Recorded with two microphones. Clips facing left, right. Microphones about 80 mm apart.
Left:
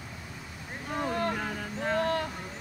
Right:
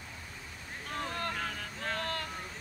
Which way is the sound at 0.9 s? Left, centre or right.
Centre.